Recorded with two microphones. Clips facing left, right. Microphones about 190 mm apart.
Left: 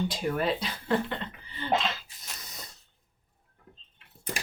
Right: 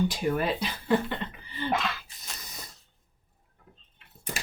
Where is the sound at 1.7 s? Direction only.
25° left (ahead or behind).